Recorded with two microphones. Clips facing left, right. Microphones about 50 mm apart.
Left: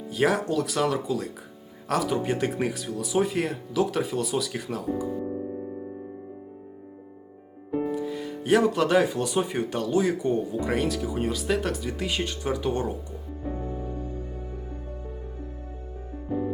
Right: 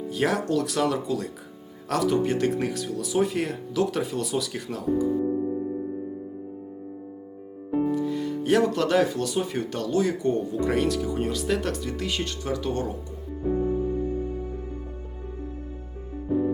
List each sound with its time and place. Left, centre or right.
0.1 s speech: centre
7.7 s speech: centre
13.5 s music: centre
13.9 s music: right
16.3 s music: centre